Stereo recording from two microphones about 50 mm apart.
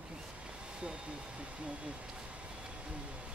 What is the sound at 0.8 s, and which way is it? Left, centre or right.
Speech, centre.